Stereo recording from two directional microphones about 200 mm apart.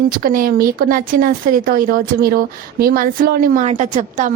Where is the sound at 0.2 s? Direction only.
45° right (ahead or behind).